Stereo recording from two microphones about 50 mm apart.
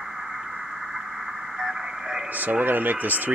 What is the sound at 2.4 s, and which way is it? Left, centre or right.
Speech, right.